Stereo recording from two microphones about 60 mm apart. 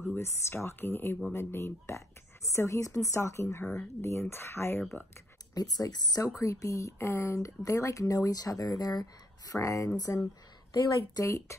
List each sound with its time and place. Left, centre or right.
0.2 s a woman's voice: left
3.6 s speech: centre
4.0 s a woman's voice: left
5.5 s speech: left
7.0 s speech: left
9.5 s speech: left
10.1 s speech: left
11.1 s speech: left